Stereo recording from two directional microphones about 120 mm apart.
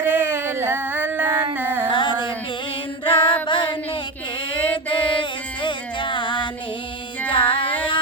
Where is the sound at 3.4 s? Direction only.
40° left (ahead or behind).